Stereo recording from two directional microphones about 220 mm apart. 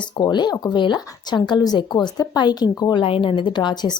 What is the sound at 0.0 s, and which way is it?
Speech, 20° left (ahead or behind).